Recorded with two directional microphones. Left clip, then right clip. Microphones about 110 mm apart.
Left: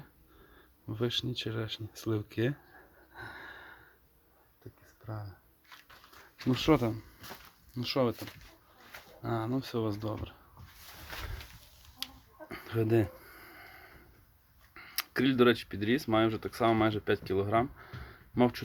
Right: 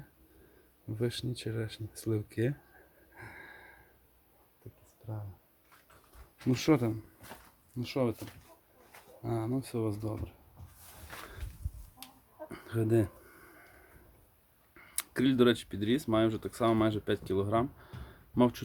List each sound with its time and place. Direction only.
0.9 s speech: 10° right (ahead or behind)
3.2 s a sound: 10° right (ahead or behind)
6.5 s speech: 20° right (ahead or behind)
7.8 s speech: centre (ahead or behind)
9.2 s speech: centre (ahead or behind)
12.5 s a sound: 25° right (ahead or behind)
14.7 s speech: 20° right (ahead or behind)